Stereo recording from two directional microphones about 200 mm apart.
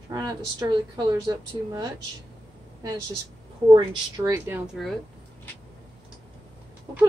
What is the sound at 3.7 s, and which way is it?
Speech, 15° right (ahead or behind).